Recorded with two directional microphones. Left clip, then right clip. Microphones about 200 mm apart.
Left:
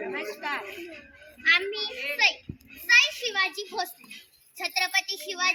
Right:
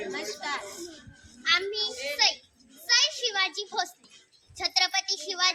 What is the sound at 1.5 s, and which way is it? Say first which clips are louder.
Children playing: left 3 dB; 10° right (ahead or behind).